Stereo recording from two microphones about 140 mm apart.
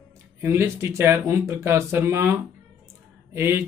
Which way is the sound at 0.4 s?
20° right (ahead or behind).